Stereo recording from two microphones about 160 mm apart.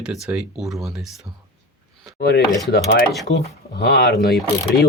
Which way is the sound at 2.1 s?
90° left.